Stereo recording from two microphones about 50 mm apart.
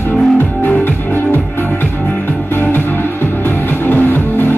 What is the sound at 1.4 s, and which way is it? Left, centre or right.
Music, left.